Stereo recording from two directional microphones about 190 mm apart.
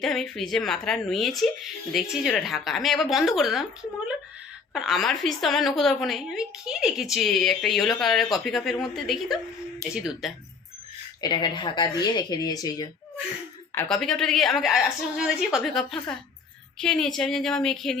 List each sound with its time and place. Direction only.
0.0 s a woman's voice: centre (ahead or behind)
11.2 s speech: 20° left (ahead or behind)
13.7 s a woman's voice: 5° left (ahead or behind)